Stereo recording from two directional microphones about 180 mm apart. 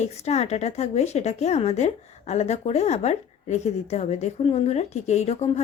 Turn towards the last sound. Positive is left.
turn(degrees=40)  # may be behind; listen again after turning